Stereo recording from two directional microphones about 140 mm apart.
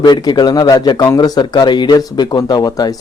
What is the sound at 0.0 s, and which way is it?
A man's voice, 30° left (ahead or behind).